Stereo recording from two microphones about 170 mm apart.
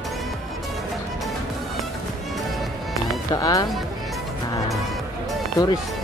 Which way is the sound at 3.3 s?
20° left (ahead or behind).